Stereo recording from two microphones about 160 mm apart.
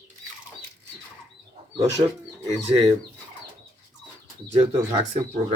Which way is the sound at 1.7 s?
20° right (ahead or behind).